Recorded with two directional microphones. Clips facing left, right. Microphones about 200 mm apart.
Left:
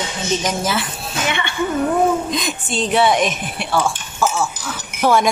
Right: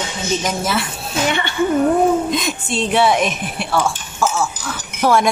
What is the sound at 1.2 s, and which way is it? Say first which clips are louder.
Speech: right 2 dB; 35° right (ahead or behind).